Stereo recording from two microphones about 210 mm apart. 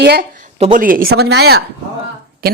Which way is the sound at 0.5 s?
35° right (ahead or behind).